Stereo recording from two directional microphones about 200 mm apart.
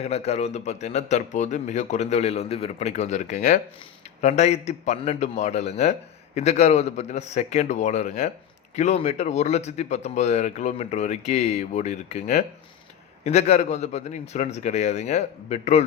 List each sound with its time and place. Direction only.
0.0 s a man's voice: 30° left (ahead or behind)